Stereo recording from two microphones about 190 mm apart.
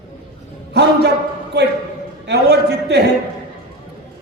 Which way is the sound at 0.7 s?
60° right (ahead or behind).